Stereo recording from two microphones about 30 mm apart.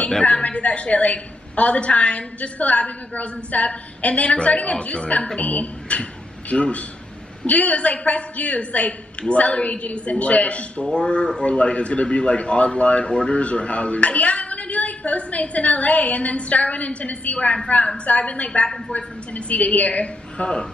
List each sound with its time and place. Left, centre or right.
0.2 s a woman's voice: left
5.4 s a woman's voice: left
7.4 s a woman's voice: left
10.8 s a man's voice: left
18.9 s a woman's voice: left